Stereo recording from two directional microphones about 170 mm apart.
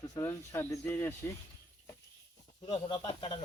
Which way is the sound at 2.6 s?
25° left (ahead or behind).